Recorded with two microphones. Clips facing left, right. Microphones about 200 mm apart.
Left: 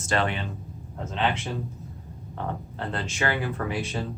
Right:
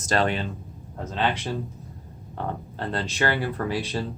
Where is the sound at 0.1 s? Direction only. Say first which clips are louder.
Right 3 dB; 35° right (ahead or behind).